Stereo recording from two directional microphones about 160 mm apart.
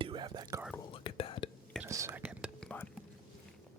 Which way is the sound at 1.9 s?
20° right (ahead or behind).